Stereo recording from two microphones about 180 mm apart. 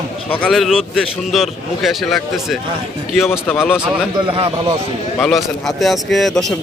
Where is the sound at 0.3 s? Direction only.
5° left (ahead or behind).